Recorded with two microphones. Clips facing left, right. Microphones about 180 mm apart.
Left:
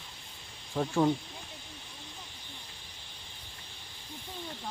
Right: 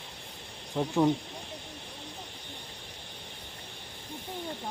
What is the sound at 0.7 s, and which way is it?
Speech, 15° right (ahead or behind).